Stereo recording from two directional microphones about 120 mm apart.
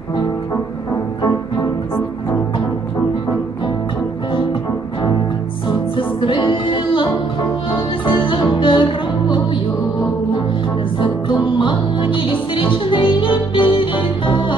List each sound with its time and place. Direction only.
5.9 s music: 40° left (ahead or behind)
11.0 s music: 40° left (ahead or behind)